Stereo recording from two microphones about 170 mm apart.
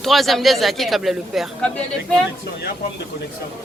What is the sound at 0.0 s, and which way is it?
A woman's voice, centre (ahead or behind).